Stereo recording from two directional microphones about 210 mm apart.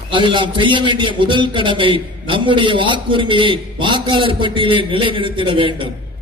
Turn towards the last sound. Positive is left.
turn(degrees=-25)  # may be behind; listen again after turning